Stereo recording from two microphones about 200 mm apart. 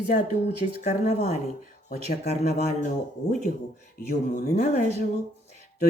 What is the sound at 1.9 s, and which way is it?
Speech, 50° left (ahead or behind).